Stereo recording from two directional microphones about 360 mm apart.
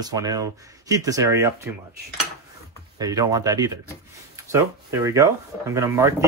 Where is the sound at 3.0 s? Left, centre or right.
Centre.